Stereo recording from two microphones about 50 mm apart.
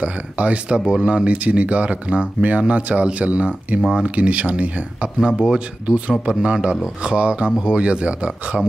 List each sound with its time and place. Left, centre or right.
0.0 s speech: right